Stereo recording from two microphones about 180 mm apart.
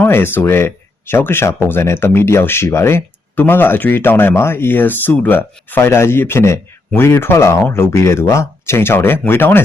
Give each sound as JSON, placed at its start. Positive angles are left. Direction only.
{"t": 0.0, "sound": "speech", "side_deg": 10}